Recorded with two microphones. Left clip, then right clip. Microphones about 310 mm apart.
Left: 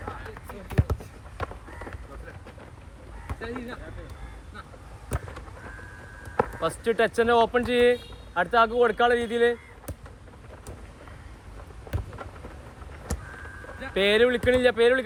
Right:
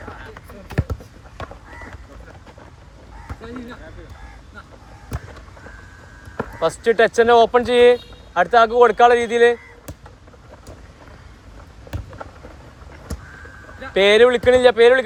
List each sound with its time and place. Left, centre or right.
0.8 s a sound: right
1.4 s crow: centre
6.6 s speech: centre
13.7 s speech: centre